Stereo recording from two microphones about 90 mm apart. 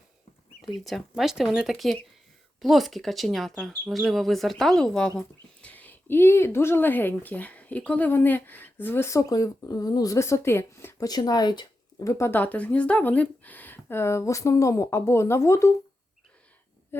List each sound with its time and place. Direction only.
0.9 s speech: centre (ahead or behind); by 10.9 s 30° left (ahead or behind)
11.0 s speech: 45° left (ahead or behind)
12.0 s speech: 40° left (ahead or behind)
12.3 s speech: 20° left (ahead or behind)
16.9 s speech: 25° left (ahead or behind)